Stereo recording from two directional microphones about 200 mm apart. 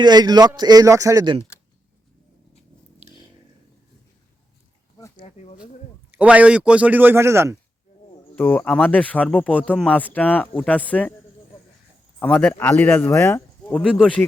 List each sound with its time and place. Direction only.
0.0 s speech: 20° right (ahead or behind)
5.2 s a sound: 35° left (ahead or behind)
6.1 s a man's voice: 5° right (ahead or behind)
8.4 s speech: 10° left (ahead or behind)
12.2 s speech: 10° left (ahead or behind)